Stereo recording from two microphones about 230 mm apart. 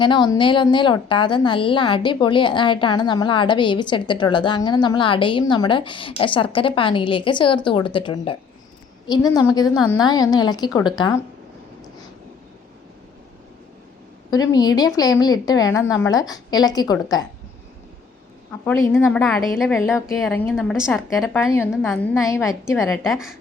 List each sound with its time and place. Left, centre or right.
0.0 s a woman's voice: centre
14.3 s a woman's voice: centre
18.6 s a woman's voice: centre
21.5 s a woman's voice: centre
22.9 s a woman's voice: centre